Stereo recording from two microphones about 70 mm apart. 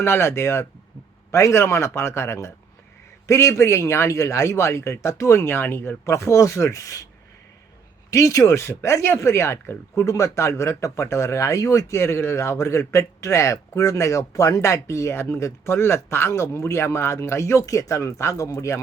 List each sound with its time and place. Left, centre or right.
0.0 s speech: left
8.1 s speech: left